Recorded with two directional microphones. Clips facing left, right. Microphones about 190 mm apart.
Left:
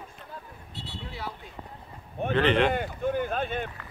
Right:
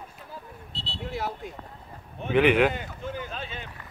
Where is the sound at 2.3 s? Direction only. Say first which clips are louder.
Right 3 dB; 10° right (ahead or behind).